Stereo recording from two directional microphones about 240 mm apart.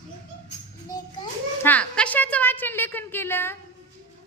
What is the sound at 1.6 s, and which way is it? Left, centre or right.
A woman's voice, centre.